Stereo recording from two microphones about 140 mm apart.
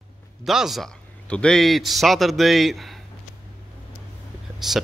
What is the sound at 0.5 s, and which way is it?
A man's voice, centre (ahead or behind).